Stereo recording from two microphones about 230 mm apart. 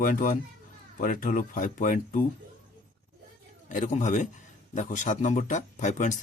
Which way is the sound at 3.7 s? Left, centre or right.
Left.